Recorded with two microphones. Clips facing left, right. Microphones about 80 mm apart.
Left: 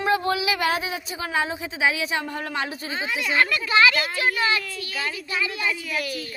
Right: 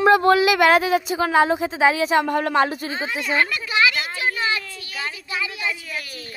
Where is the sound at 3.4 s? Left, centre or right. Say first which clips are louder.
Left 3 dB; centre.